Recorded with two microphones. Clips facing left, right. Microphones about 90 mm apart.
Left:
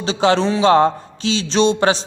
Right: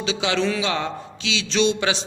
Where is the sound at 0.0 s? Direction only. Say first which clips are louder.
Left 6 dB; 40° left (ahead or behind).